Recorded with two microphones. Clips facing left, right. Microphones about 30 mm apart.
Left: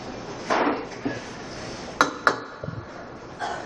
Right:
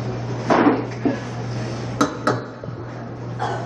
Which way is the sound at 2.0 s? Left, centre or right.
Centre.